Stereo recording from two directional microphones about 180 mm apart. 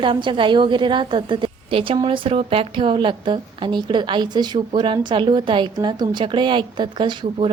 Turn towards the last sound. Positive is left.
turn(degrees=-30)  # may be behind; listen again after turning